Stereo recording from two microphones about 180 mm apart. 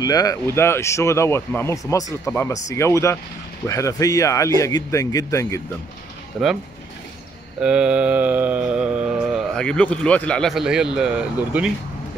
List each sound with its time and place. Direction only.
0.0 s speech: 20° left (ahead or behind)
6.4 s mantra: 5° right (ahead or behind)
7.6 s mantra: 5° right (ahead or behind)